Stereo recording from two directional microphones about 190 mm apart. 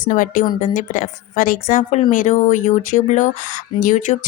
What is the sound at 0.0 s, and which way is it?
A woman's voice, 45° left (ahead or behind).